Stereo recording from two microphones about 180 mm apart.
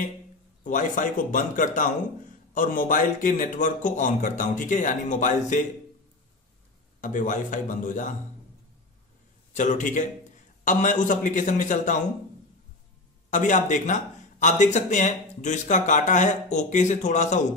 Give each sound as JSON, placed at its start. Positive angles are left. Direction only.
{"t": 0.7, "sound": "a man's voice", "side_deg": 45}
{"t": 7.0, "sound": "a man's voice", "side_deg": 45}
{"t": 9.5, "sound": "a man's voice", "side_deg": 45}
{"t": 13.3, "sound": "speech", "side_deg": 45}